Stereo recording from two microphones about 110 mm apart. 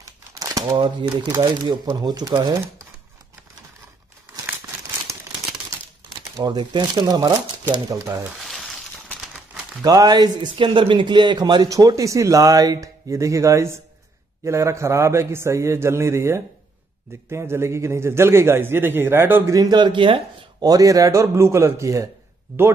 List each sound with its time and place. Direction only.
0.0 s a sound: 30° right (ahead or behind)
0.7 s speech: 45° right (ahead or behind)
5.1 s crumpling: 25° right (ahead or behind)
6.3 s a man's voice: 40° right (ahead or behind)
8.5 s a sound: centre (ahead or behind)
9.8 s speech: 35° right (ahead or behind)
11.7 s a man's voice: 30° right (ahead or behind)
19.5 s speech: 35° right (ahead or behind)
20.6 s a man's voice: 35° right (ahead or behind)